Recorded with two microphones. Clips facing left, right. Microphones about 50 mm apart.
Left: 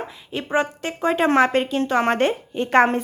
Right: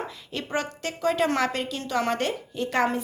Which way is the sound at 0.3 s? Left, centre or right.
Left.